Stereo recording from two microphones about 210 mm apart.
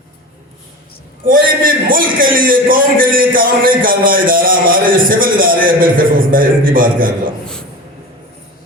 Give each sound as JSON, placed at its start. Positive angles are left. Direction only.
{"t": 1.3, "sound": "a man's voice", "side_deg": -40}